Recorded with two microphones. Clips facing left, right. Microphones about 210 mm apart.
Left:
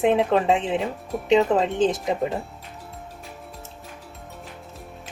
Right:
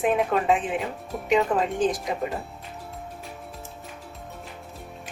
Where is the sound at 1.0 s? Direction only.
Centre (ahead or behind).